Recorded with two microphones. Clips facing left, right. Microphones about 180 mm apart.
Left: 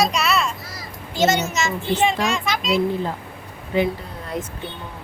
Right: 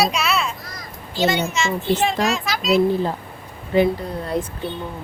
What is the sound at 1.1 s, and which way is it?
Speech, 45° left (ahead or behind).